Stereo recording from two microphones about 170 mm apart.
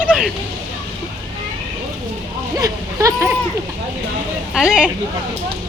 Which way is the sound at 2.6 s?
20° right (ahead or behind).